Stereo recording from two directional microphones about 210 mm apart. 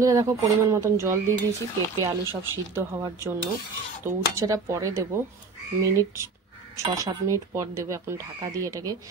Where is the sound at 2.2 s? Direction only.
15° left (ahead or behind).